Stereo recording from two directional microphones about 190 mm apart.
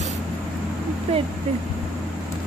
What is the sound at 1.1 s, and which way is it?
Speech, 30° right (ahead or behind).